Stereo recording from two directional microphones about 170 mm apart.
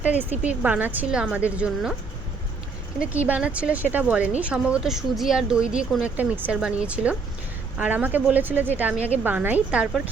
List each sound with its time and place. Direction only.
0.0 s speech: 10° right (ahead or behind)
3.2 s speech: 10° right (ahead or behind)